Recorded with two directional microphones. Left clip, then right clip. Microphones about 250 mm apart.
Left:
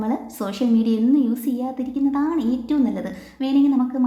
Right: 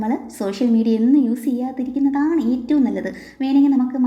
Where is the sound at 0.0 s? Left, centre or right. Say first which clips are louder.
Right 3 dB; centre.